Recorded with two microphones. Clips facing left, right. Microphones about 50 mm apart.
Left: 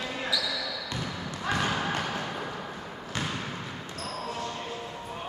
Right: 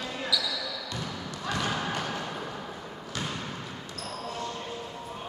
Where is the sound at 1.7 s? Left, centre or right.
Centre.